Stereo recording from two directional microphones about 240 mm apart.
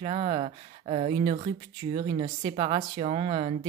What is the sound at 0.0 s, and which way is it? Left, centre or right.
Speech, right.